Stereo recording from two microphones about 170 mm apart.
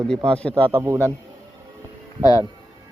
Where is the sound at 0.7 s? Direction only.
15° right (ahead or behind).